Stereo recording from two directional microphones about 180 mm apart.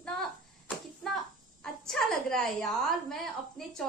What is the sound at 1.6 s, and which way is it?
A woman's voice, centre (ahead or behind).